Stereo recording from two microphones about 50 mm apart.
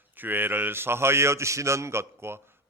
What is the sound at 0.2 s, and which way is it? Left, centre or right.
A man's voice, right.